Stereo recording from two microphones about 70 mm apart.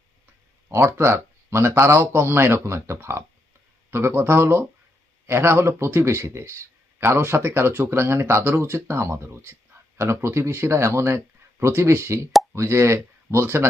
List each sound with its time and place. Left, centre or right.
0.7 s speech: right